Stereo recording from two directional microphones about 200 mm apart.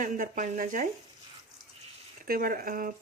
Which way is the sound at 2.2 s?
45° right (ahead or behind).